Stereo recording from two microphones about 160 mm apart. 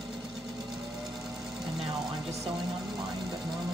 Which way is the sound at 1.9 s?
25° right (ahead or behind).